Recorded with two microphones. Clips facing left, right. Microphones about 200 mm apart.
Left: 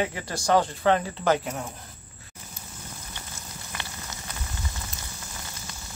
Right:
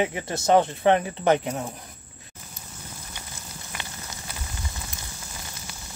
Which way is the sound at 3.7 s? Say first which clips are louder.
Even; 20° right (ahead or behind).